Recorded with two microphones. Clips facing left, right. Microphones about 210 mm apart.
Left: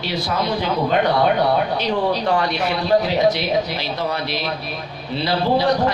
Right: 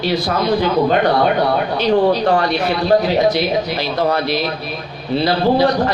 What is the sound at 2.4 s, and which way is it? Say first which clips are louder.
A man's voice: right 4 dB; 35° right (ahead or behind).